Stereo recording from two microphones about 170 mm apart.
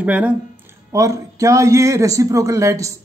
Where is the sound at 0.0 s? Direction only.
10° right (ahead or behind).